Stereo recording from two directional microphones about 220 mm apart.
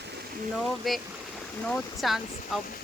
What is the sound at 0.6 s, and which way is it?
Speech, centre (ahead or behind).